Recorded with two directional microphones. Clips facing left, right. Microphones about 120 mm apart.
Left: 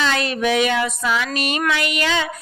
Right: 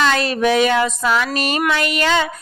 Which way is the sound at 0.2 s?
35° right (ahead or behind).